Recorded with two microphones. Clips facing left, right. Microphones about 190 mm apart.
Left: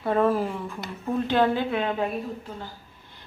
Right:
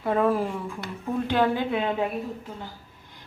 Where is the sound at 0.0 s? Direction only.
Centre (ahead or behind).